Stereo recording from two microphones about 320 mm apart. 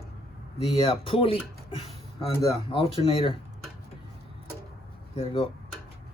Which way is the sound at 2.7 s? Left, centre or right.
Centre.